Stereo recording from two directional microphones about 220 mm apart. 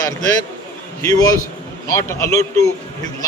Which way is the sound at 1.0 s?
15° left (ahead or behind).